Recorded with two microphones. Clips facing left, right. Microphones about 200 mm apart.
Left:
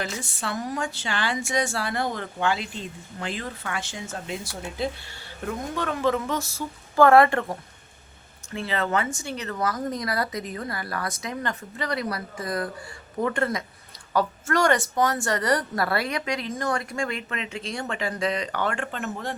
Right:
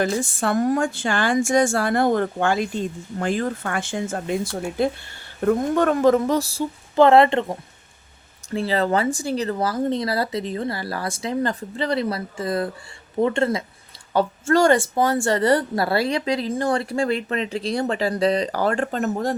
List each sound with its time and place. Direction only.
0.0 s a woman's voice: 50° right (ahead or behind); by 7.5 s 20° right (ahead or behind)
8.4 s a woman's voice: 35° right (ahead or behind)